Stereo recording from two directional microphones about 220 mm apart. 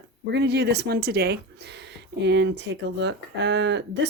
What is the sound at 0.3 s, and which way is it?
Speech, 50° right (ahead or behind).